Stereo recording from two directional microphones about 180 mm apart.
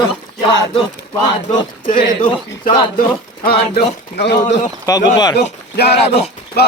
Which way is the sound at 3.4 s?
55° left (ahead or behind).